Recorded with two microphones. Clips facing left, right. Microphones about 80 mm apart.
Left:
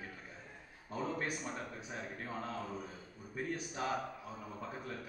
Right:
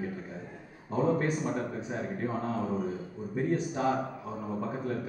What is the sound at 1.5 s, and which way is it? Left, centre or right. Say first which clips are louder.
A man's voice: right 10 dB; right.